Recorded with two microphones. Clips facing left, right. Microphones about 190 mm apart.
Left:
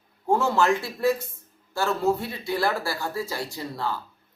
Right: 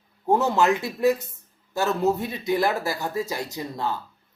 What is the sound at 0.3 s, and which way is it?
Speech, 20° right (ahead or behind).